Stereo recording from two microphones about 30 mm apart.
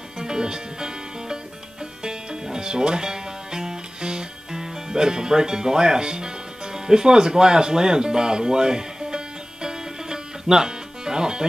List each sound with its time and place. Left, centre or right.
0.2 s music: right